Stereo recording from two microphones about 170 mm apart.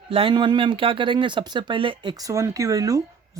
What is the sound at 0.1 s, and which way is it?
Speech, 30° right (ahead or behind).